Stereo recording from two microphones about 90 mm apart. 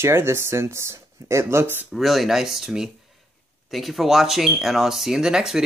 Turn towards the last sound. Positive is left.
turn(degrees=-5)  # may be behind; listen again after turning